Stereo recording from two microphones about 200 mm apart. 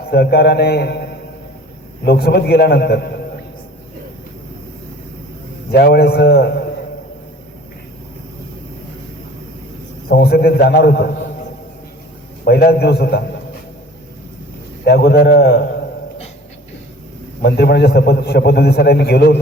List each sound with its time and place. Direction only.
0.0 s a man's voice: 55° left (ahead or behind)
2.0 s a man's voice: 55° left (ahead or behind)
5.7 s a man's voice: 55° left (ahead or behind)
10.1 s a man's voice: 50° left (ahead or behind)
12.5 s a man's voice: 55° left (ahead or behind)
14.8 s a man's voice: 55° left (ahead or behind)
17.4 s a man's voice: 55° left (ahead or behind)